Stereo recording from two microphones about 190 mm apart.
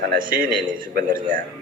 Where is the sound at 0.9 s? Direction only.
50° right (ahead or behind).